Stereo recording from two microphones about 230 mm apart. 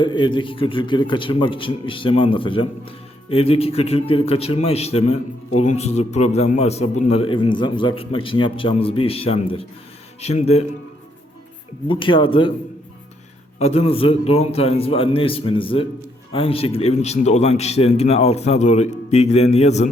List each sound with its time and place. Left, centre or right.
0.0 s a man's voice: left
11.9 s a man's voice: left
13.6 s a man's voice: left